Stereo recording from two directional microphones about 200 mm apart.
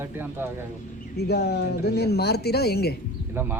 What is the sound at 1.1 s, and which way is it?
Speech, 55° left (ahead or behind).